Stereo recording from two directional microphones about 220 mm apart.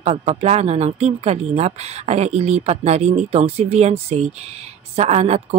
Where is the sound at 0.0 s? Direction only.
30° right (ahead or behind).